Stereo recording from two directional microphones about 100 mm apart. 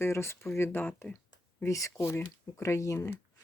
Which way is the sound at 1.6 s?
30° left (ahead or behind).